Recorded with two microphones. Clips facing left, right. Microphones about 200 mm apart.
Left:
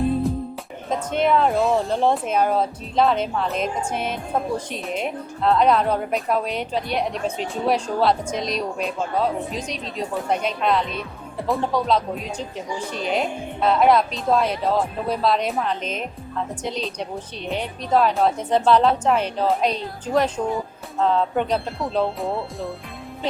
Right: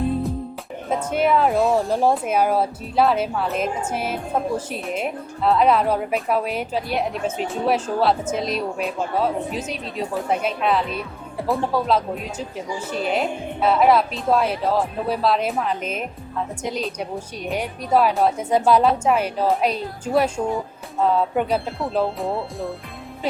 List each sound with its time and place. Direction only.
0.9 s a woman's voice: 5° right (ahead or behind)